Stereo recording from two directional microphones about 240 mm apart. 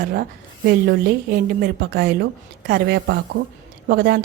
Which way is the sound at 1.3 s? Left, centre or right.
Right.